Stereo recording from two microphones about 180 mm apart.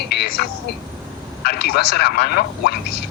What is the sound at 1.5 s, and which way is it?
Speech, 65° left (ahead or behind).